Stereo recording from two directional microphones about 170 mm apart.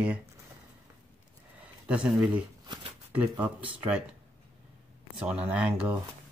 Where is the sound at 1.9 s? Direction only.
5° right (ahead or behind).